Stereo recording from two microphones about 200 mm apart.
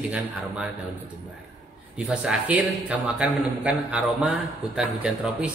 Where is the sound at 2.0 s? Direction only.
5° right (ahead or behind).